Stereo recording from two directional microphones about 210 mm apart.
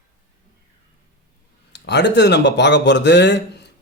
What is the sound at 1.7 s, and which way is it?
Speech, 55° left (ahead or behind).